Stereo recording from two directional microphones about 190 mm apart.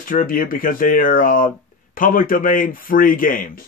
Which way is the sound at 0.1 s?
45° left (ahead or behind).